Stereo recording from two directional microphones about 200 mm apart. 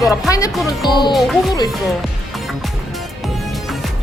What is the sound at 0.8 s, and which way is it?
Speech, 20° left (ahead or behind).